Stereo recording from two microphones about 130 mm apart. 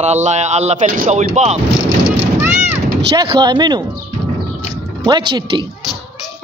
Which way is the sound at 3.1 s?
35° right (ahead or behind).